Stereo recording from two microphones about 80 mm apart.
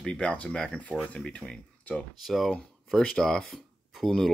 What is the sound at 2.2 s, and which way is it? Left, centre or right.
Speech, centre.